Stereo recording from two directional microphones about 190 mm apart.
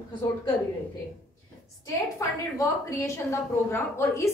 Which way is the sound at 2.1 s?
15° left (ahead or behind).